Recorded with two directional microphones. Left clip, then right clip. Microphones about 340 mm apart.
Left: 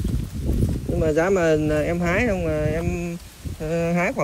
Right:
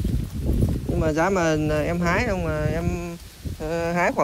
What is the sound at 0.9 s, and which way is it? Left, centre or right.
Speech, centre.